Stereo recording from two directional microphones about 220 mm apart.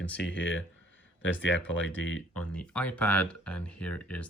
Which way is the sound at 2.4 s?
5° left (ahead or behind).